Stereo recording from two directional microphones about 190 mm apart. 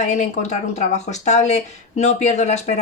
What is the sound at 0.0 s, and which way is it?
A woman's voice, 40° left (ahead or behind).